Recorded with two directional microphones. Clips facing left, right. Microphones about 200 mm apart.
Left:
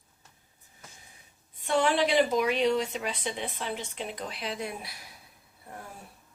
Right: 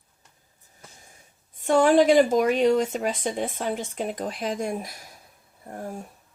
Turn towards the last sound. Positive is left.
turn(degrees=-45)  # may be behind; listen again after turning